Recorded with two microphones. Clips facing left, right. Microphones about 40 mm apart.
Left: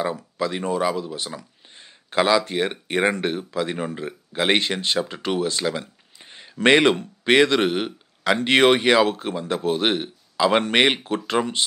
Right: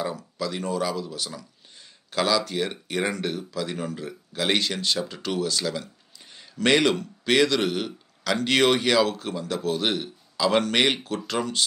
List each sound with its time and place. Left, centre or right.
0.0 s a man's voice: left